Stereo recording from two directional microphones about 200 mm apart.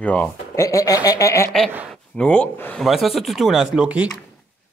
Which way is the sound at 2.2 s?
5° left (ahead or behind).